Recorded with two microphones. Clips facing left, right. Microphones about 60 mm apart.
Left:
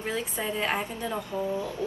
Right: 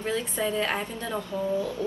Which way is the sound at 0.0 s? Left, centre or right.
Centre.